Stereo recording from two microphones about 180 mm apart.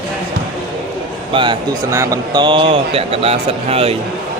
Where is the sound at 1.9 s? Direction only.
15° right (ahead or behind); by 3.9 s 35° right (ahead or behind).